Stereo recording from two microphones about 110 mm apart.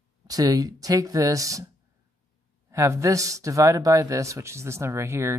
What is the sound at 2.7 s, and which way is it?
Speech, 30° right (ahead or behind).